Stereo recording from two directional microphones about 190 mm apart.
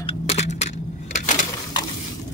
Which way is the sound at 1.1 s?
40° left (ahead or behind).